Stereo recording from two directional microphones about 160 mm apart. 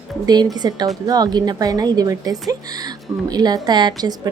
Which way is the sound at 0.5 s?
25° right (ahead or behind).